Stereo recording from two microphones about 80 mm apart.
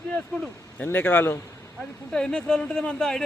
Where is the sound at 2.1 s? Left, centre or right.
Centre.